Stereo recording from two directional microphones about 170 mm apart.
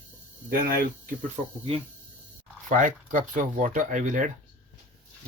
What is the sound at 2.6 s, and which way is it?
Speech, 50° right (ahead or behind).